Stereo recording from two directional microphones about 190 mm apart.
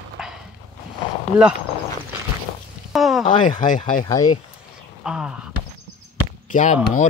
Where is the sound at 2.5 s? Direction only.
35° left (ahead or behind).